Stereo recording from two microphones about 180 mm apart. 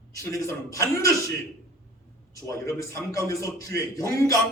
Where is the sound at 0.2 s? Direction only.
20° left (ahead or behind).